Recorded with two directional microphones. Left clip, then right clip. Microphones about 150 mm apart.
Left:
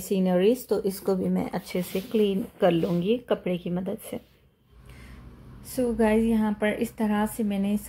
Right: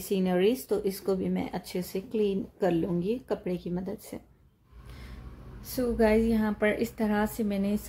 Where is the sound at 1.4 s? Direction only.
5° right (ahead or behind).